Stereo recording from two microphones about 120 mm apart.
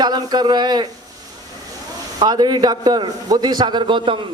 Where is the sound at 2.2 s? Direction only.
35° right (ahead or behind).